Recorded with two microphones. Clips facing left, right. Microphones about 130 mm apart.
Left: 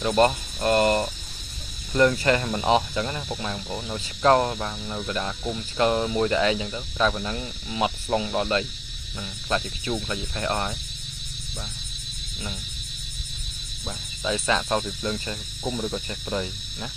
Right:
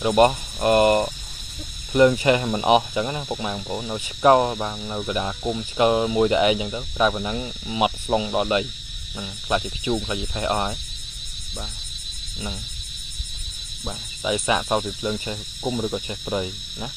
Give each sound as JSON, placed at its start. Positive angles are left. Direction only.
{"t": 0.0, "sound": "speech", "side_deg": -15}
{"t": 13.8, "sound": "speech", "side_deg": -15}